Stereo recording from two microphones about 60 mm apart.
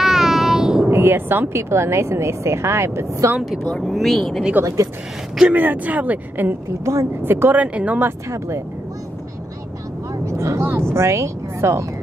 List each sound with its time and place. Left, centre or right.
0.0 s child singing: centre
0.8 s speech: right
3.8 s speech: centre
5.5 s speech: right
6.8 s speech: right
7.3 s speech: right
7.6 s speech: right
8.3 s speech: right
10.2 s speech: right